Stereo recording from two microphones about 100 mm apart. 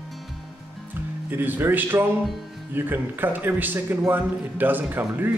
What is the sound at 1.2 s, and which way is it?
A man's voice, 20° right (ahead or behind).